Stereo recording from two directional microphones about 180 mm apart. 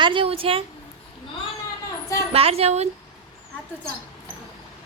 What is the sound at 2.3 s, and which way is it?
Speech, 35° right (ahead or behind).